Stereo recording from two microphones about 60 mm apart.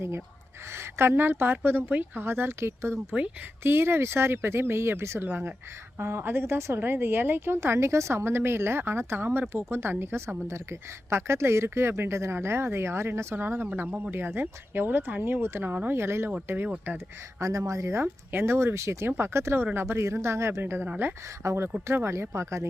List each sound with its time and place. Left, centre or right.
0.8 s a woman's voice: right
5.3 s a woman's voice: right
17.4 s a woman's voice: right
20.8 s speech: right
21.4 s a woman's voice: right